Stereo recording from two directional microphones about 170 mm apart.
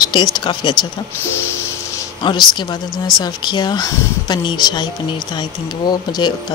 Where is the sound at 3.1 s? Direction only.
25° left (ahead or behind).